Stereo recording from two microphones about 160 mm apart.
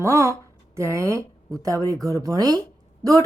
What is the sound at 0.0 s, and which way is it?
A woman's voice, 15° right (ahead or behind).